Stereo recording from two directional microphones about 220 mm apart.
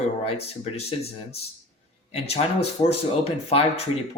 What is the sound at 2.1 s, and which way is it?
Speech, 30° left (ahead or behind).